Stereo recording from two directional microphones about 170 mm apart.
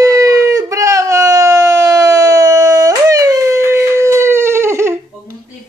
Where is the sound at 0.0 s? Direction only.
20° right (ahead or behind).